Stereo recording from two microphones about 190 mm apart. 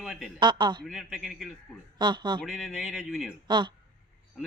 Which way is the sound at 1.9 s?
25° right (ahead or behind).